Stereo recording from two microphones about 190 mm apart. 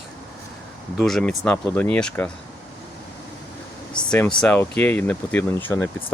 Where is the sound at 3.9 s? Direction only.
5° left (ahead or behind).